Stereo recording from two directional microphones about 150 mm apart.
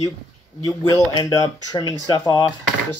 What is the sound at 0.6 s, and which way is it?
Speech, 25° left (ahead or behind).